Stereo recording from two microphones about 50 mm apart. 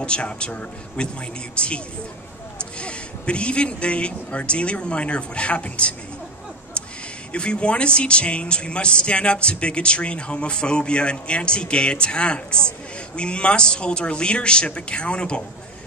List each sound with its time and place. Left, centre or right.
0.0 s speech: left
7.3 s speech: left